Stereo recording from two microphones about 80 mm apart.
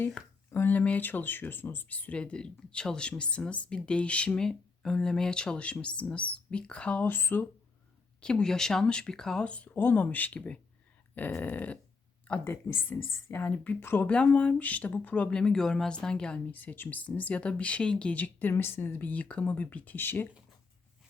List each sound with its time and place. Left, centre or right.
0.5 s speech: left
8.2 s speech: centre
12.5 s speech: left